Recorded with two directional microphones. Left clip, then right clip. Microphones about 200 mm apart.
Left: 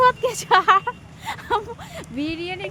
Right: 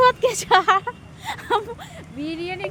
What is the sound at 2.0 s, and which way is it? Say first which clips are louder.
Speech: left 6 dB; 35° left (ahead or behind).